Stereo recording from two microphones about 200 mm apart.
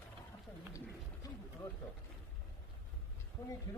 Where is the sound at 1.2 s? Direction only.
20° left (ahead or behind).